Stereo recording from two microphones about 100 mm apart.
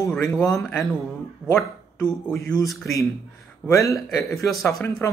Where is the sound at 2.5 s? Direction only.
35° left (ahead or behind).